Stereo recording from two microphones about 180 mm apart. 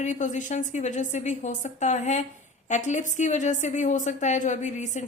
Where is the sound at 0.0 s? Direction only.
45° left (ahead or behind).